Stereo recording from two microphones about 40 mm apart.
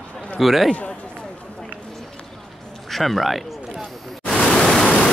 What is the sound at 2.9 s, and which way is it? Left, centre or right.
Speech, centre.